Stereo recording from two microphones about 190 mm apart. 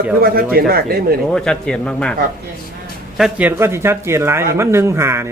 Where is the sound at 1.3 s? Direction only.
5° left (ahead or behind).